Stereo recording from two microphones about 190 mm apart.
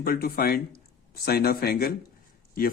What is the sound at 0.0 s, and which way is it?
Speech, 50° left (ahead or behind).